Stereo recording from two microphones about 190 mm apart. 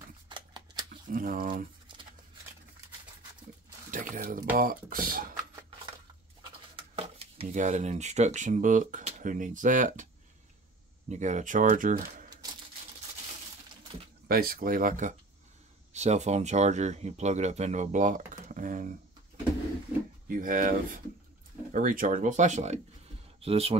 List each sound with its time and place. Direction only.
0.3 s a sound: 25° right (ahead or behind)
0.8 s speech: 45° right (ahead or behind)
3.9 s a sound: 45° right (ahead or behind)
4.6 s speech: 50° right (ahead or behind)
6.8 s speech: 30° right (ahead or behind)
11.1 s speech: 40° right (ahead or behind)
14.2 s speech: 50° right (ahead or behind)
20.2 s speech: 45° right (ahead or behind)